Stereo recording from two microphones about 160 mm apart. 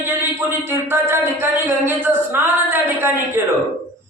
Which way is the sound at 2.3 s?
15° right (ahead or behind).